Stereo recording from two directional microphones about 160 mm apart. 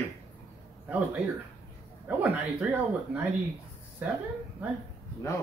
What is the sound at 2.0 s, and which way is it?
Speech, 10° right (ahead or behind).